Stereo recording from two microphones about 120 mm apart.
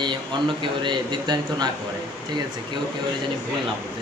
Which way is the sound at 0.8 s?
35° right (ahead or behind).